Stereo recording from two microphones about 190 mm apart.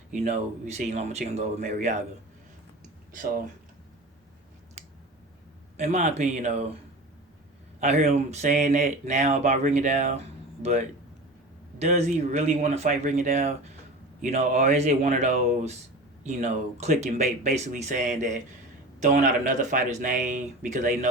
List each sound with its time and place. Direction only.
0.1 s speech: 40° right (ahead or behind)
3.1 s speech: 45° right (ahead or behind)
5.7 s speech: 35° right (ahead or behind)
7.8 s speech: 35° right (ahead or behind)